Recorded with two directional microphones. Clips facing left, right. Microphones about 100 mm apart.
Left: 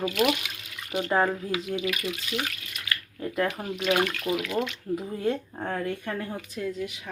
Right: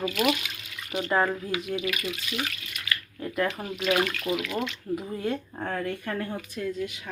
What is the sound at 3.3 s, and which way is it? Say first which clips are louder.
Speech: even; 20° left (ahead or behind).